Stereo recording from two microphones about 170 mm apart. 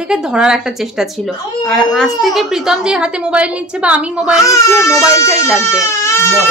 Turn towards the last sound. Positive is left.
turn(degrees=15)  # may be behind; listen again after turning